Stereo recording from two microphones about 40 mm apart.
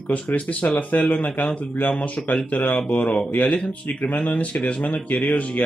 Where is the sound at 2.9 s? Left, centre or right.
Left.